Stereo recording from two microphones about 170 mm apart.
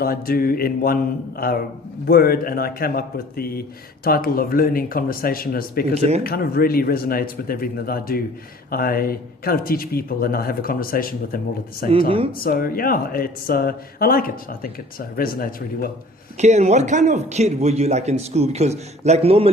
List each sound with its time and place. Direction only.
0.0 s speech: 60° left (ahead or behind)
2.0 s speech: 60° left (ahead or behind)
5.9 s a man's voice: 40° right (ahead or behind)
6.2 s speech: 60° left (ahead or behind)
11.9 s a man's voice: 35° right (ahead or behind)
12.4 s speech: 60° left (ahead or behind)
16.4 s a man's voice: 40° right (ahead or behind)